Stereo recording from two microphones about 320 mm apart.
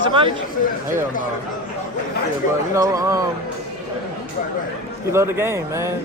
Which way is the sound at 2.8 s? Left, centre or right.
Centre.